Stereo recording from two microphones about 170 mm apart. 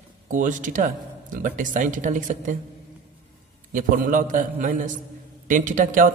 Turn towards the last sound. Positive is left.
turn(degrees=-50)  # may be behind; listen again after turning